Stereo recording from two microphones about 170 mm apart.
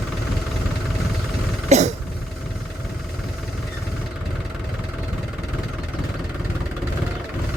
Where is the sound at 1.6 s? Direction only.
40° right (ahead or behind).